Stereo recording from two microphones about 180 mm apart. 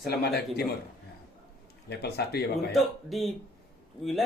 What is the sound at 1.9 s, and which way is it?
Speech, 65° left (ahead or behind).